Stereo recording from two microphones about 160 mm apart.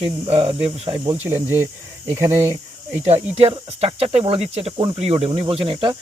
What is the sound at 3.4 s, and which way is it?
Speech, 40° right (ahead or behind).